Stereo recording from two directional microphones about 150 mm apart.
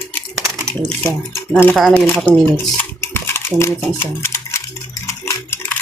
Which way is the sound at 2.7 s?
15° left (ahead or behind).